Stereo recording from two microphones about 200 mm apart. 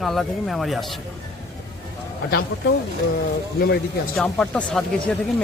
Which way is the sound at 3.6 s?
55° left (ahead or behind).